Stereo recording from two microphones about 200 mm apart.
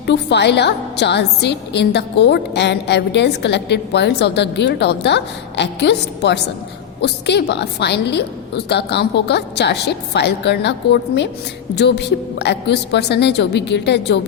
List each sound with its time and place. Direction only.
0.0 s a woman's voice: 60° left (ahead or behind)